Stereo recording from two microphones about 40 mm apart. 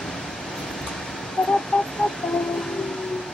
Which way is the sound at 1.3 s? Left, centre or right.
Centre.